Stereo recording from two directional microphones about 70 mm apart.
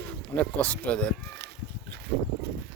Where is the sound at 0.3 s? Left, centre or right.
Left.